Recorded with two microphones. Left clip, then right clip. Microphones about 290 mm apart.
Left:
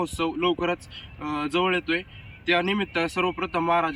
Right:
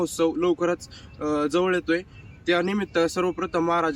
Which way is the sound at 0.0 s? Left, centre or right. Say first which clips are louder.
Right 2 dB; centre.